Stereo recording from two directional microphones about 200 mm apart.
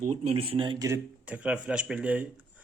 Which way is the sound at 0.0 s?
35° right (ahead or behind).